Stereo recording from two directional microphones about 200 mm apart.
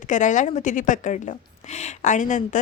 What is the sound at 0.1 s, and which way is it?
Speech, 40° left (ahead or behind).